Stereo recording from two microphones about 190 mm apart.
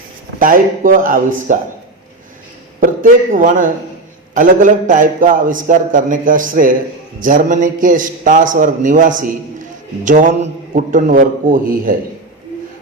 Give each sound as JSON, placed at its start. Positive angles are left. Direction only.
{"t": 0.3, "sound": "a man's voice", "side_deg": -45}
{"t": 2.8, "sound": "a man's voice", "side_deg": -45}